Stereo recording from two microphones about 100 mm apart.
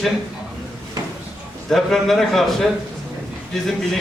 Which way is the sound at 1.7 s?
5° left (ahead or behind).